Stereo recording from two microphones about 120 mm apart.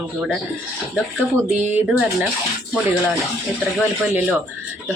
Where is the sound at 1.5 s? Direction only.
15° right (ahead or behind).